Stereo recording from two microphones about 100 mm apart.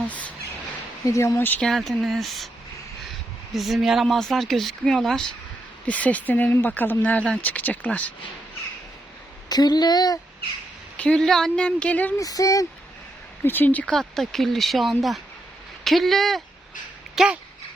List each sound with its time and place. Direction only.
0.1 s bird: 15° left (ahead or behind)
1.0 s speech: 30° left (ahead or behind)
1.6 s speech: centre (ahead or behind)
3.5 s speech: centre (ahead or behind); by 8.0 s 15° left (ahead or behind)
9.5 s speech: 45° left (ahead or behind)
10.9 s speech: 10° left (ahead or behind)
12.1 s speech: 35° left (ahead or behind)
13.4 s speech: 20° left (ahead or behind)
13.9 s speech: 5° left (ahead or behind)
17.2 s speech: 10° right (ahead or behind)